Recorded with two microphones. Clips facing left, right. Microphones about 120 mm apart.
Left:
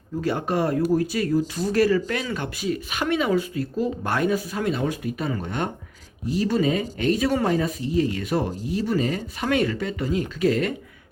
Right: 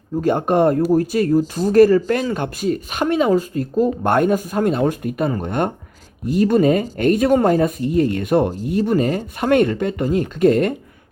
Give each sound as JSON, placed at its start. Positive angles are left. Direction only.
{"t": 0.2, "sound": "speech", "side_deg": -45}